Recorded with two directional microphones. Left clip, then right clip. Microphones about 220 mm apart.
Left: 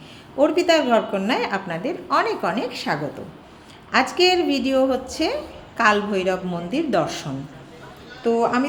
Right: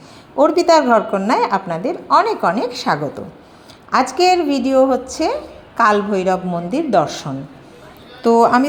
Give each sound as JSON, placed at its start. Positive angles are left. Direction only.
{"t": 0.3, "sound": "a woman's voice", "side_deg": -20}
{"t": 8.2, "sound": "a man's voice", "side_deg": -30}